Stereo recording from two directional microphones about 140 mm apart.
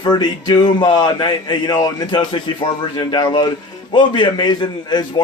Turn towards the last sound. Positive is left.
turn(degrees=30)  # may be behind; listen again after turning